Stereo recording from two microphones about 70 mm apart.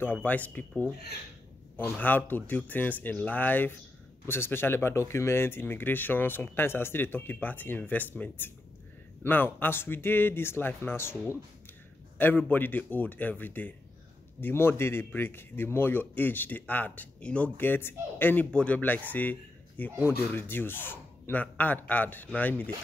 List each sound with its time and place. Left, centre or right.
0.0 s speech: left
17.6 s speech: left